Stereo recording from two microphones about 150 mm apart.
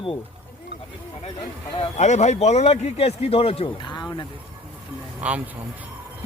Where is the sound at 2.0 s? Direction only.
50° left (ahead or behind); by 4.3 s 30° left (ahead or behind).